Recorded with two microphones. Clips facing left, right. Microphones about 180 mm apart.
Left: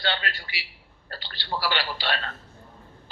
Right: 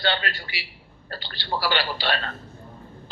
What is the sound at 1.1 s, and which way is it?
A man's voice, 65° right (ahead or behind).